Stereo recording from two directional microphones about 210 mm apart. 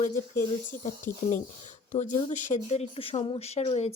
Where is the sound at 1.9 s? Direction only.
35° left (ahead or behind).